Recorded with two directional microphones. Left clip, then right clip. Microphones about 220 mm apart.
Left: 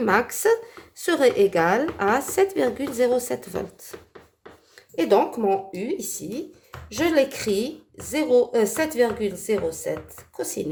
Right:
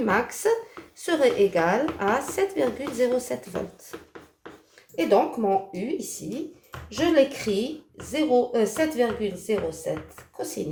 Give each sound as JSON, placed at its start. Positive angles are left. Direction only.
{"t": 0.0, "sound": "speech", "side_deg": 45}
{"t": 4.9, "sound": "speech", "side_deg": 45}
{"t": 7.0, "sound": "speech", "side_deg": 50}